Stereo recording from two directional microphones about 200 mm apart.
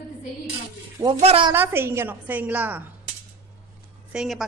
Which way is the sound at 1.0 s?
25° right (ahead or behind).